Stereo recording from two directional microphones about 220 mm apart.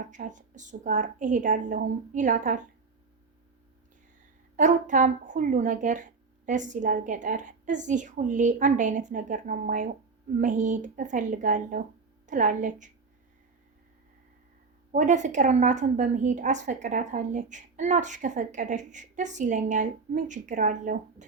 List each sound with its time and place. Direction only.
0.0 s a woman's voice: 35° right (ahead or behind)
4.5 s a woman's voice: 35° right (ahead or behind)
14.9 s a woman's voice: 35° right (ahead or behind)